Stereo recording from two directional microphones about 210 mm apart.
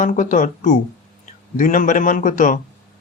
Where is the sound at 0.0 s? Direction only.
40° left (ahead or behind).